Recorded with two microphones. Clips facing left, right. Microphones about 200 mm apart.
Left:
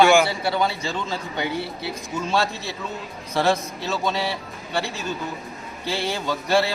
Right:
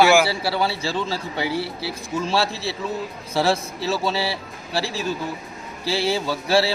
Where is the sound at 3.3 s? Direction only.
5° right (ahead or behind).